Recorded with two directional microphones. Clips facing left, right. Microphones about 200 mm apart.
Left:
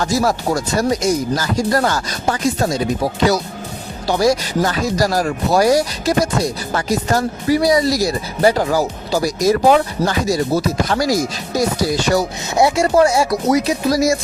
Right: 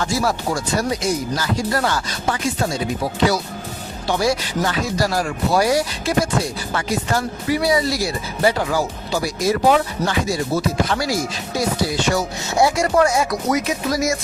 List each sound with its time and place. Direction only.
0.0 s speech: 40° left (ahead or behind)
12.5 s speech: 25° left (ahead or behind)